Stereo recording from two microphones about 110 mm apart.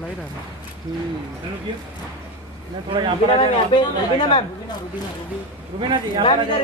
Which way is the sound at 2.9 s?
50° right (ahead or behind).